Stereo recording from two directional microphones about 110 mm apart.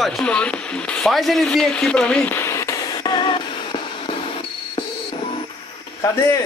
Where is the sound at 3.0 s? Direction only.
40° left (ahead or behind).